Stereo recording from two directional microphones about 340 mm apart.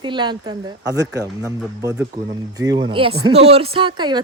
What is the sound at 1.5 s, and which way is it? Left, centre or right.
Speech, centre.